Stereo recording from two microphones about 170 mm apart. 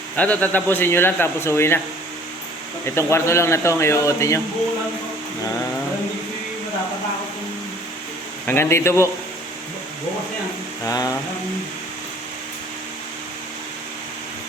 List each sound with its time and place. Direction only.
0.2 s a man's voice: 10° left (ahead or behind)
2.8 s a man's voice: 15° left (ahead or behind)
8.4 s a man's voice: 15° left (ahead or behind)
10.8 s mantra: 20° left (ahead or behind)